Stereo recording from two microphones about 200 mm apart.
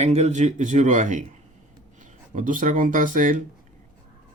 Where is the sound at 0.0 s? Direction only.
35° right (ahead or behind).